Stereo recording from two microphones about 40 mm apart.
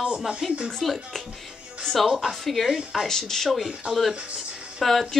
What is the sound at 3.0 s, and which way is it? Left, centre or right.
Speech, centre.